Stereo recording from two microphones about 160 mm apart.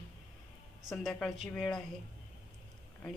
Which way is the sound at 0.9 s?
Centre (ahead or behind).